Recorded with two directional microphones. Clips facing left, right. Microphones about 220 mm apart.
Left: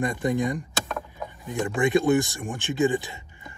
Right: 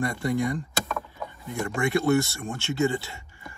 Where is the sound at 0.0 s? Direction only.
20° left (ahead or behind).